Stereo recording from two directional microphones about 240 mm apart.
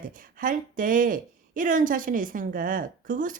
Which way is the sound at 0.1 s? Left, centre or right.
Right.